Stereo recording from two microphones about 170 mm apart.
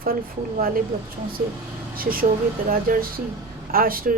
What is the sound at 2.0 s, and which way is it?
Speech, 60° right (ahead or behind).